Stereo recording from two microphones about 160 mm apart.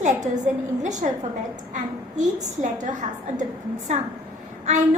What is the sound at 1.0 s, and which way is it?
Speech, 55° right (ahead or behind).